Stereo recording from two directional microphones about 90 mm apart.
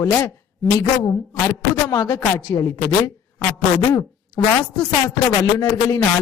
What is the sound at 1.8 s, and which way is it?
A woman's voice, 35° left (ahead or behind).